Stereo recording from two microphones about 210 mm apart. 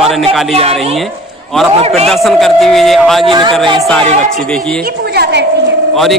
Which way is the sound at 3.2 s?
25° right (ahead or behind).